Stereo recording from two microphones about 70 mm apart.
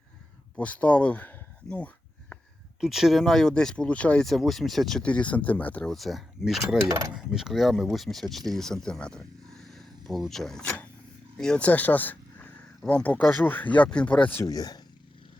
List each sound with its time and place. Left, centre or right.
0.6 s speech: left
2.8 s speech: centre
4.3 s speech: centre
5.0 s speech: centre
5.9 s speech: centre
14.4 s speech: left